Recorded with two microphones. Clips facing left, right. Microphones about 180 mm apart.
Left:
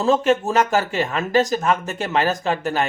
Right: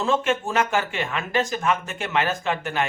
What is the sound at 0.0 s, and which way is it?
Speech, 40° left (ahead or behind).